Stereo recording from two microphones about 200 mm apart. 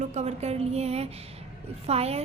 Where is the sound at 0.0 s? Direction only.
35° right (ahead or behind).